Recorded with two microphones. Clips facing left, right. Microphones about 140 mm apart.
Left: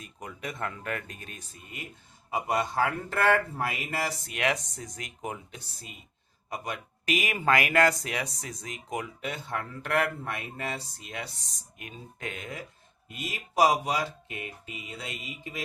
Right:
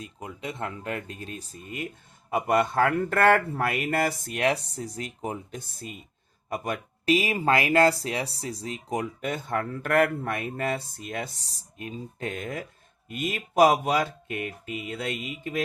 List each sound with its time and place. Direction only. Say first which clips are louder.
0.0 s speech: right 3 dB; 25° right (ahead or behind); by 1.9 s 45° right (ahead or behind)
2.3 s speech: right 5 dB; 55° right (ahead or behind); by 5.5 s 35° right (ahead or behind)
5.5 s speech: right 8 dB; 50° right (ahead or behind)
7.0 s speech: right 5 dB; 30° right (ahead or behind); by 11.4 s 50° right (ahead or behind)
11.4 s speech: right 7 dB; 35° right (ahead or behind); by 15.6 s 55° right (ahead or behind)